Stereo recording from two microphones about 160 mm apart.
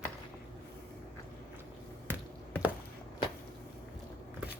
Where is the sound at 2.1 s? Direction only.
10° right (ahead or behind).